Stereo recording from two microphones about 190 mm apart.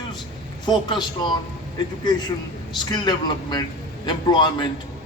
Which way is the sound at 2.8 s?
25° left (ahead or behind).